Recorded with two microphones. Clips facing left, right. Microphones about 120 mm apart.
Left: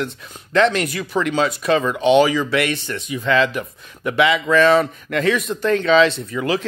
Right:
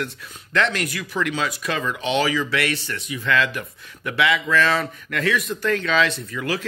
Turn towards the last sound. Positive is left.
turn(degrees=25)  # may be behind; listen again after turning